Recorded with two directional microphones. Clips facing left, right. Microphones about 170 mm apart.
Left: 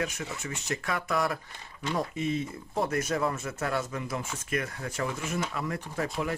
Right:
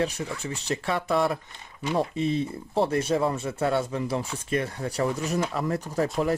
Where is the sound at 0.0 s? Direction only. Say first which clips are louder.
Right 5 dB; 30° right (ahead or behind).